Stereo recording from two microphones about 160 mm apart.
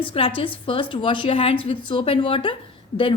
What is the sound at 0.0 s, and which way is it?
Speech, 35° left (ahead or behind).